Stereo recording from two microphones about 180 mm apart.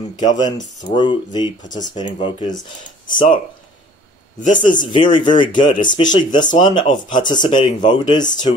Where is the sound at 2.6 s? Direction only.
45° left (ahead or behind).